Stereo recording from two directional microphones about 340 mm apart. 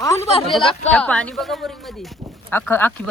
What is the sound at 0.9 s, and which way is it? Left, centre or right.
Speech, centre.